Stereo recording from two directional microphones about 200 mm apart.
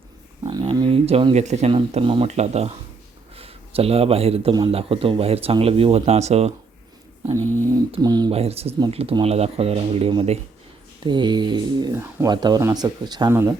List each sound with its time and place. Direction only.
0.4 s a man's voice: 25° right (ahead or behind)
7.6 s a sound: 15° right (ahead or behind)
7.9 s a man's voice: 20° right (ahead or behind)